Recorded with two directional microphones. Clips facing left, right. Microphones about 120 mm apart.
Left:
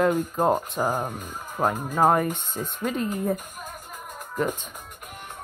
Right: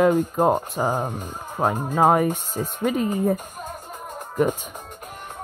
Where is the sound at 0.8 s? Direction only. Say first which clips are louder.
Right 3 dB; 15° right (ahead or behind).